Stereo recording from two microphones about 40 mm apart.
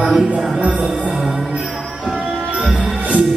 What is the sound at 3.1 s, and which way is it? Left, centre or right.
Music, right.